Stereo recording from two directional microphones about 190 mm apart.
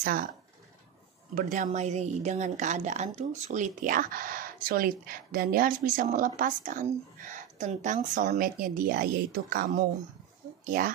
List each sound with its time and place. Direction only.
0.0 s a woman's voice: 45° right (ahead or behind)
1.3 s a woman's voice: 45° right (ahead or behind)